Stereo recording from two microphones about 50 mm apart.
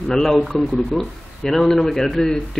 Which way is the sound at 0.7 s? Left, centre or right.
Centre.